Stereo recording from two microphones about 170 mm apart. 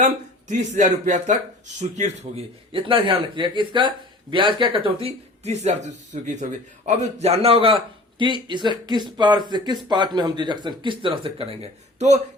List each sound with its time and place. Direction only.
0.0 s speech: 45° right (ahead or behind)